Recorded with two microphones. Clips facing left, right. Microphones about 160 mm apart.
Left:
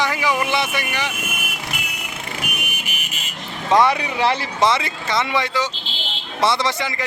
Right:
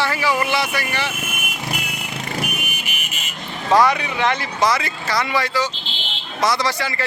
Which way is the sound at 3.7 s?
25° left (ahead or behind).